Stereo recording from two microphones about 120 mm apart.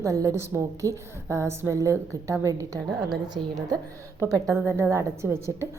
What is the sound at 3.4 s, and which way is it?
Speech, 50° right (ahead or behind).